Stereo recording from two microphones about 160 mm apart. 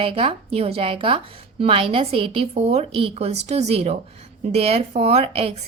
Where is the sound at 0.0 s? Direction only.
35° right (ahead or behind).